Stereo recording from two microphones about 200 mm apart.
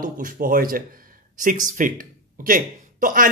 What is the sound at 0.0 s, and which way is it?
Speech, 45° right (ahead or behind).